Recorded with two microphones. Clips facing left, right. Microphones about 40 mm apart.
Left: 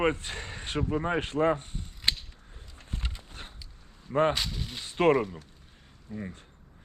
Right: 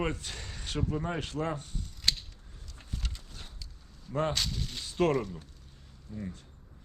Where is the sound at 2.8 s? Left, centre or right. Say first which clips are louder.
Left 3 dB; left.